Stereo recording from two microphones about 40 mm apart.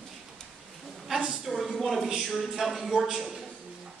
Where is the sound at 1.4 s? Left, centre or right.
Centre.